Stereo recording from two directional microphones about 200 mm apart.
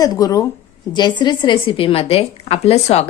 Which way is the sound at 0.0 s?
20° left (ahead or behind).